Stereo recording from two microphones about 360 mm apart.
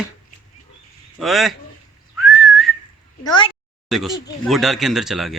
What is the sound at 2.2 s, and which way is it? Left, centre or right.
Whistling, centre.